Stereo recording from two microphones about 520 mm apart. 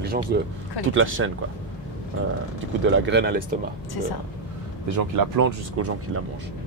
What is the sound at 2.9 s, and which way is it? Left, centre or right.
Speech, centre.